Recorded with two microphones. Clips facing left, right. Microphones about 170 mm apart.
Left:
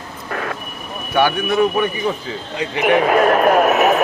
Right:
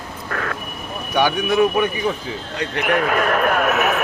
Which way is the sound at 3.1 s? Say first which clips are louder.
Left 6 dB; 40° left (ahead or behind).